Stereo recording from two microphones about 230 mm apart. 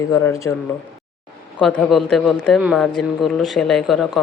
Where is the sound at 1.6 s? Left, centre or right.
Centre.